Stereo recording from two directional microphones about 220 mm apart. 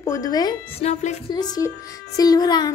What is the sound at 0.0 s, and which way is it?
Speech, 15° left (ahead or behind).